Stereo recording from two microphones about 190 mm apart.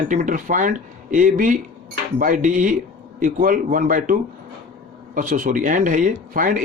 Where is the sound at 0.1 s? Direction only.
45° right (ahead or behind).